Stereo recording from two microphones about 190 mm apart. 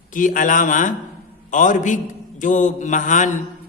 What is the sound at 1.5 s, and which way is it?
Mantra, 40° left (ahead or behind).